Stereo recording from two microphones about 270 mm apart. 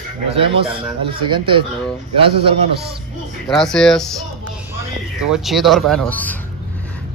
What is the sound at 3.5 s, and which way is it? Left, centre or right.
Speech, centre.